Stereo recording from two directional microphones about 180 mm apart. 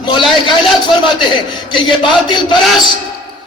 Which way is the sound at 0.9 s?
25° left (ahead or behind).